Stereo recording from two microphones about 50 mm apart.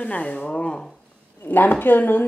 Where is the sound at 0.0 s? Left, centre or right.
Left.